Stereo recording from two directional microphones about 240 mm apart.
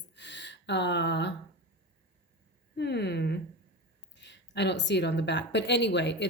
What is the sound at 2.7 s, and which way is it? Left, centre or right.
A woman's voice, left.